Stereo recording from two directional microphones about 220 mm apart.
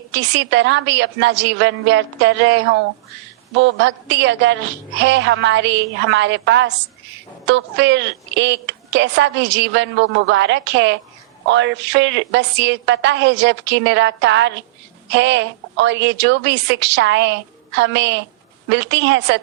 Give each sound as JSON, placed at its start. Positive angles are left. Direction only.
{"t": 0.1, "sound": "a woman's voice", "side_deg": -55}
{"t": 3.8, "sound": "a woman's voice", "side_deg": -55}